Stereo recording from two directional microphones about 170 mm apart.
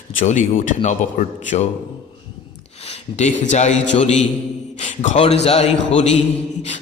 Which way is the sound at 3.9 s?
45° left (ahead or behind).